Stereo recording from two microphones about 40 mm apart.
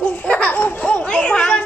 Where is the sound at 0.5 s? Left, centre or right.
Left.